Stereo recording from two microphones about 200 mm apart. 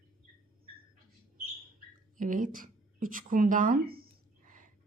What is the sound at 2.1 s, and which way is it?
Speech, 40° right (ahead or behind).